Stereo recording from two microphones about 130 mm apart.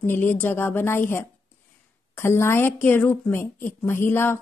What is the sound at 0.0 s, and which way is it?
A woman's voice, 15° left (ahead or behind).